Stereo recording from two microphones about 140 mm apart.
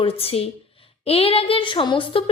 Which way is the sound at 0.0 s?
45° left (ahead or behind).